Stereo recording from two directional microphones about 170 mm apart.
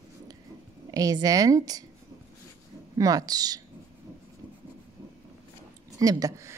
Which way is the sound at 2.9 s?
20° right (ahead or behind).